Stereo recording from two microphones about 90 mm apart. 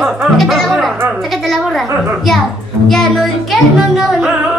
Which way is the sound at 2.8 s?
5° left (ahead or behind).